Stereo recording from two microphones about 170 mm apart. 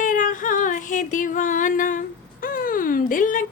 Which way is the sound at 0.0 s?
50° left (ahead or behind).